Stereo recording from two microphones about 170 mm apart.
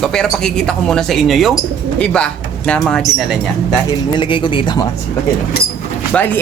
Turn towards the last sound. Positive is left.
turn(degrees=10)  # may be behind; listen again after turning